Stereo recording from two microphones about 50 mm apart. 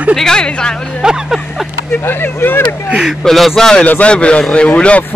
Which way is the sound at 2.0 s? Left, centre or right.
Left.